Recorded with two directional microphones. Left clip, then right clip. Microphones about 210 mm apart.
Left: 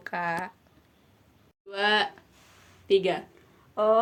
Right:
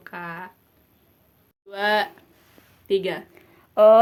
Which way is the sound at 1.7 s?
Centre (ahead or behind).